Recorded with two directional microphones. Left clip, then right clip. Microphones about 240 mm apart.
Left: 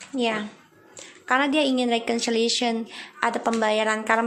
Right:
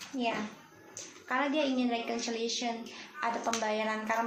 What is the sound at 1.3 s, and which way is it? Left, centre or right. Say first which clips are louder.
A woman's voice: left 9 dB; left.